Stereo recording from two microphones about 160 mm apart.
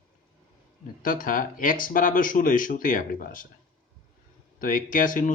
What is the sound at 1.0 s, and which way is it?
Speech, 60° left (ahead or behind).